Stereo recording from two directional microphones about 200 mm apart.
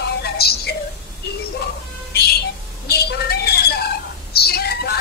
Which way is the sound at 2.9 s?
50° left (ahead or behind).